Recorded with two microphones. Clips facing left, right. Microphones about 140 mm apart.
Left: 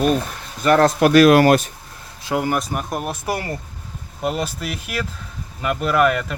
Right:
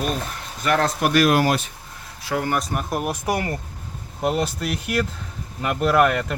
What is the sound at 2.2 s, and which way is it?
Speech, 20° left (ahead or behind).